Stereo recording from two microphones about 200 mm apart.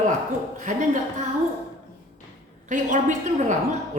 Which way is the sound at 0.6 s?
40° right (ahead or behind).